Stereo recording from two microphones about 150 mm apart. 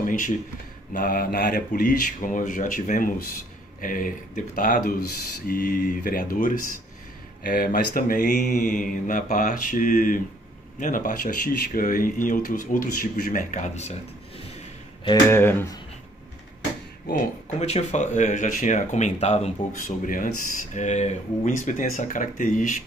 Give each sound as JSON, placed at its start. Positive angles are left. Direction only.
{"t": 0.0, "sound": "a sound", "side_deg": 60}
{"t": 0.9, "sound": "speech", "side_deg": 70}
{"t": 15.2, "sound": "speech", "side_deg": 15}
{"t": 17.6, "sound": "speech", "side_deg": 45}